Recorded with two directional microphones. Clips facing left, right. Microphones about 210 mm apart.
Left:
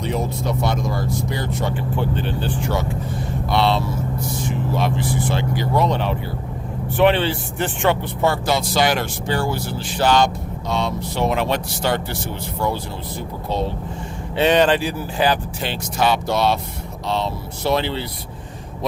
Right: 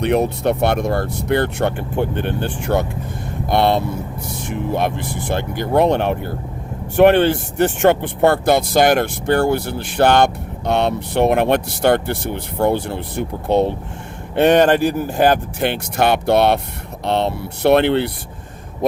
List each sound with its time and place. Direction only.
0.0 s speech: 65° right (ahead or behind); by 7.9 s 45° right (ahead or behind)
8.2 s speech: 55° right (ahead or behind)